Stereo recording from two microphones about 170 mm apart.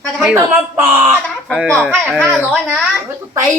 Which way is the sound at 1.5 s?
Centre (ahead or behind).